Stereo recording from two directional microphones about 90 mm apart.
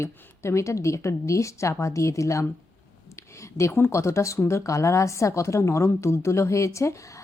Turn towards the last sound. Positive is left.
turn(degrees=35)  # may be behind; listen again after turning